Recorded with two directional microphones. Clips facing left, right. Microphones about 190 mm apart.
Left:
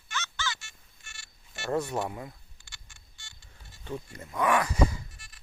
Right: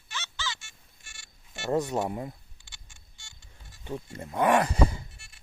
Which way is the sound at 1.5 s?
15° right (ahead or behind).